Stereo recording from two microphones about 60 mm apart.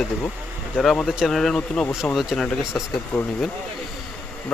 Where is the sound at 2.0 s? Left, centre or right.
Centre.